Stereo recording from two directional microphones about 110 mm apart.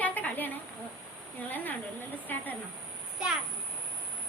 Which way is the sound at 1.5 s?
15° left (ahead or behind).